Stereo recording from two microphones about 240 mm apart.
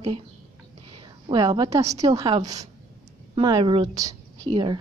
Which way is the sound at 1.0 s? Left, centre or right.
Centre.